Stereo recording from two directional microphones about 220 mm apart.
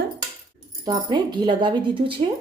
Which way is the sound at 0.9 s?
20° right (ahead or behind).